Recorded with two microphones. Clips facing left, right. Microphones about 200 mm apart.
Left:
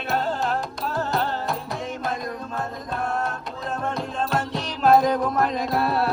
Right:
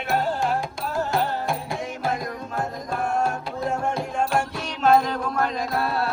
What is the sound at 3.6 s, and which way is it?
Music, 15° right (ahead or behind).